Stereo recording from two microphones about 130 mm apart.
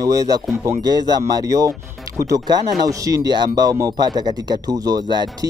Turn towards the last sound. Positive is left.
turn(degrees=-35)  # may be behind; listen again after turning